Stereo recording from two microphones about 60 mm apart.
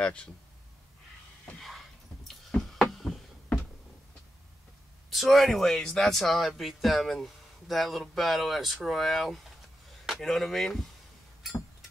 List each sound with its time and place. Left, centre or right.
0.0 s speech: centre
2.2 s a sound: centre
5.1 s speech: centre